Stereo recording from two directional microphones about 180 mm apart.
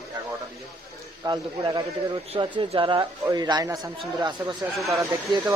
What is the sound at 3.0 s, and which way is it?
A man's voice, 20° right (ahead or behind).